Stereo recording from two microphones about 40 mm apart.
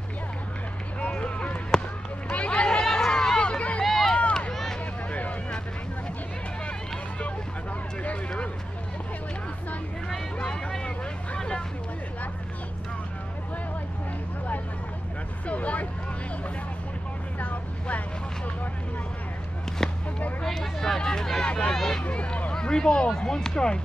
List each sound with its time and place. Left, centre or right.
1.1 s a sound: left
3.4 s run: left
3.8 s run: centre
4.5 s vehicle: centre
11.3 s vehicle: left
15.4 s vehicle: left
17.4 s vehicle: left
19.8 s a sound: centre
22.0 s a sound: left